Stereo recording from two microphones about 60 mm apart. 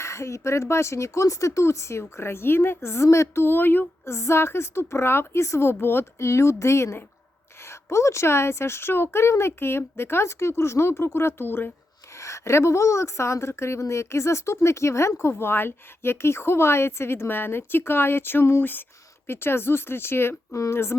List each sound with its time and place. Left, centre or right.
0.0 s a woman's voice: left
4.0 s a woman's voice: left
12.1 s a woman's voice: left